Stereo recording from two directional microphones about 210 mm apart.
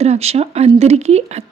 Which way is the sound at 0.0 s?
30° right (ahead or behind).